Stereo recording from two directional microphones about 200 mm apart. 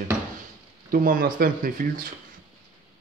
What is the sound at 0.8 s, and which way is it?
Speech, 45° right (ahead or behind).